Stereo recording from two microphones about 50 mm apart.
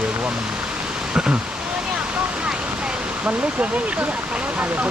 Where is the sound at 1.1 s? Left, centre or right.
Centre.